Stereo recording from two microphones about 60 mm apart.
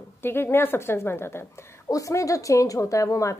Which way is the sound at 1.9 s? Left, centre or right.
Left.